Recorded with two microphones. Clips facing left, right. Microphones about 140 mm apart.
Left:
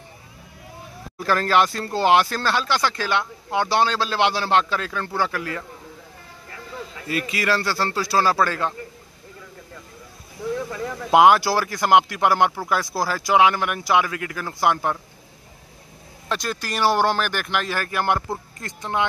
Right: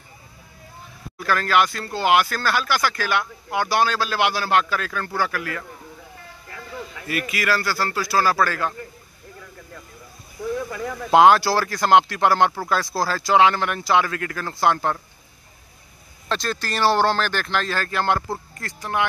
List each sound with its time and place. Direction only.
1.2 s speech: 30° left (ahead or behind)
7.1 s speech: 25° left (ahead or behind)
11.1 s speech: 15° left (ahead or behind)
16.3 s speech: 15° left (ahead or behind)